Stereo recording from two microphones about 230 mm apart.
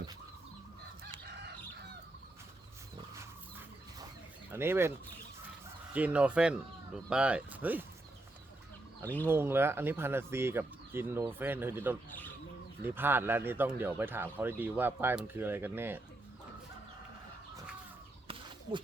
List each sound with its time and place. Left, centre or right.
1.2 s chicken: right
4.5 s speech: centre
5.9 s speech: centre
9.2 s speech: centre